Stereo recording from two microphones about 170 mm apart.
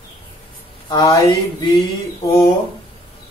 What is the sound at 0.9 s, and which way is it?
Speech, 20° left (ahead or behind).